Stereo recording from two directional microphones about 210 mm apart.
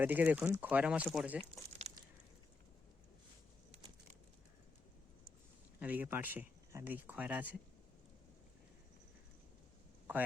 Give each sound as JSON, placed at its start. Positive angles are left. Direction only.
{"t": 0.0, "sound": "speech", "side_deg": -10}
{"t": 1.8, "sound": "a sound", "side_deg": -30}
{"t": 5.8, "sound": "speech", "side_deg": -10}